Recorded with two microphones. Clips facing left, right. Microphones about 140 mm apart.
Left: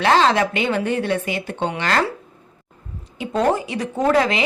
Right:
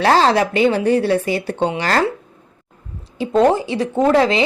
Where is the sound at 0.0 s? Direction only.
35° right (ahead or behind).